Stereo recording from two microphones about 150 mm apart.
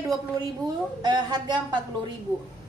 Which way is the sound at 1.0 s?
25° right (ahead or behind).